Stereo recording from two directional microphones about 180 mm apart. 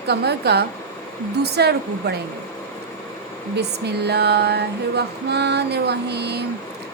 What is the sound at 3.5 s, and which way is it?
Female singing, 65° right (ahead or behind).